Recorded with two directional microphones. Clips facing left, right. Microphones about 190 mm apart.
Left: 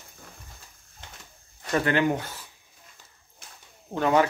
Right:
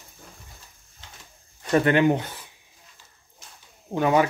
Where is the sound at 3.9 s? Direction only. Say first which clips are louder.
Right 1 dB; 15° right (ahead or behind).